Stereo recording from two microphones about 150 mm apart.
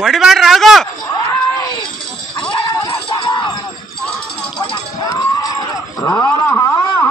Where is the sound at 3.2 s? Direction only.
30° left (ahead or behind).